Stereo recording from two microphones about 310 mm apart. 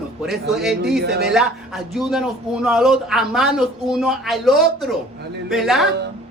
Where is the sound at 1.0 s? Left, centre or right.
Right.